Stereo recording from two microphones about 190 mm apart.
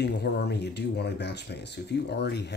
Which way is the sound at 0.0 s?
60° left (ahead or behind).